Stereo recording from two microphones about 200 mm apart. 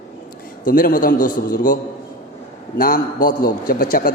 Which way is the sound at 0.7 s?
45° left (ahead or behind).